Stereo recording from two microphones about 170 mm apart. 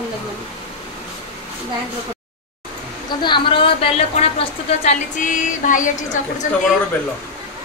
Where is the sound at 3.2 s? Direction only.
30° left (ahead or behind); by 6.2 s 50° left (ahead or behind).